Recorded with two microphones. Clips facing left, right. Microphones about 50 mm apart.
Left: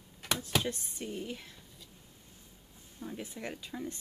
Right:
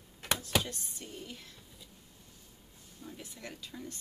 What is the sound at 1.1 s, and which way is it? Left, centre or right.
Speech, centre.